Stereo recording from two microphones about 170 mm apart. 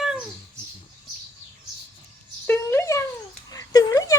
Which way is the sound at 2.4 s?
15° left (ahead or behind).